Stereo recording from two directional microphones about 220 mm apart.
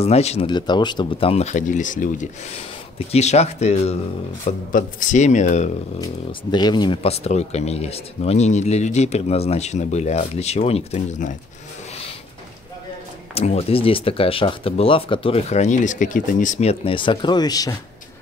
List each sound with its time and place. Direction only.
0.0 s speech: 30° left (ahead or behind)
6.5 s speech: 20° left (ahead or behind)
13.3 s speech: 25° left (ahead or behind)